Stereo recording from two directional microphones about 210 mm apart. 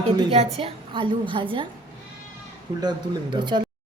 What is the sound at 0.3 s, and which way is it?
A woman's voice, 25° right (ahead or behind).